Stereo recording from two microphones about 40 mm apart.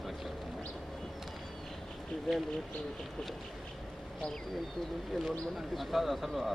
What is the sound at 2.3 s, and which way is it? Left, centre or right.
Speech, centre.